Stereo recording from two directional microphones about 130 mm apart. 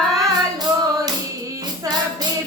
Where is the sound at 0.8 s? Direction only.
30° right (ahead or behind).